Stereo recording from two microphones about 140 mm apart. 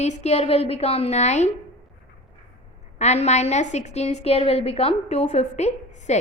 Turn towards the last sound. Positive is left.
turn(degrees=55)  # may be behind; listen again after turning